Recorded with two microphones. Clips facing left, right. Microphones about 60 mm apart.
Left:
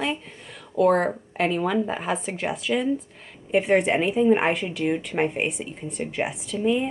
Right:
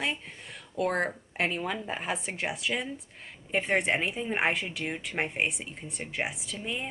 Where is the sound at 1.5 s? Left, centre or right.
Centre.